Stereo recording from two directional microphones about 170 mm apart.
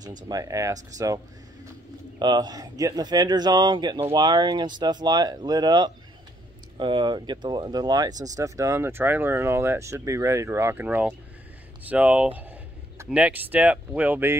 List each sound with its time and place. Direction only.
0.3 s speech: 20° right (ahead or behind)